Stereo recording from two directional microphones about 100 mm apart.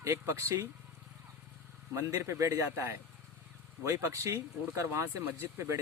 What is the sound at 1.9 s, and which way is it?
Speech, 30° right (ahead or behind).